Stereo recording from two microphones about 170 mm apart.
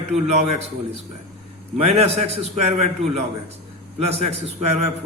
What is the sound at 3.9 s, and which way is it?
Speech, 35° right (ahead or behind).